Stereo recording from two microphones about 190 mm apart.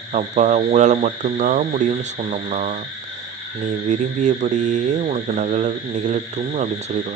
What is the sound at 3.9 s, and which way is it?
Mantra, 40° right (ahead or behind).